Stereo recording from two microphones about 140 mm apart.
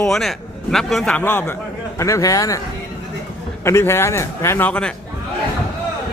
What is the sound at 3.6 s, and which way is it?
A man's voice, 20° left (ahead or behind).